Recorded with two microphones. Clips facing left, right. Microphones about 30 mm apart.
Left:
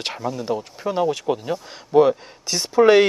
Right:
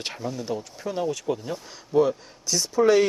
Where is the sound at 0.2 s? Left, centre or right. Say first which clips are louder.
Left 5 dB; centre.